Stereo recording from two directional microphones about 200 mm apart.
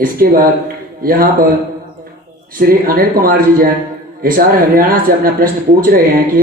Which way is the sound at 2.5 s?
45° right (ahead or behind).